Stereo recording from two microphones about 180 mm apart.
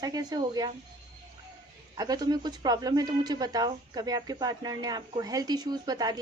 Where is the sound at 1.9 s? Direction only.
20° right (ahead or behind).